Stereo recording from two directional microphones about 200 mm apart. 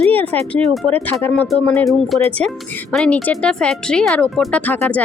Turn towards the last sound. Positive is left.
turn(degrees=5)  # may be behind; listen again after turning